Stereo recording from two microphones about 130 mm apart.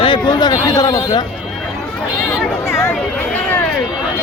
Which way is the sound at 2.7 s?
20° left (ahead or behind).